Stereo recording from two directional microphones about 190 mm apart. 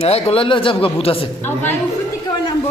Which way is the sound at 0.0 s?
30° left (ahead or behind).